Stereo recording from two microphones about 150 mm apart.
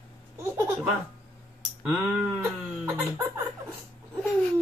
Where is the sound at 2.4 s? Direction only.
20° right (ahead or behind).